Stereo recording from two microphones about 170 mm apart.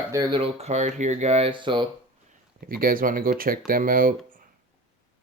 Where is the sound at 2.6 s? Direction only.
60° right (ahead or behind).